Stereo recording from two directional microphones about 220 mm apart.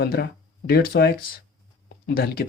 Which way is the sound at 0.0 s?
45° left (ahead or behind).